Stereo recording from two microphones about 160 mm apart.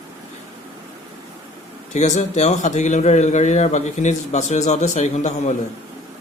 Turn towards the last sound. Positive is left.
turn(degrees=45)  # may be behind; listen again after turning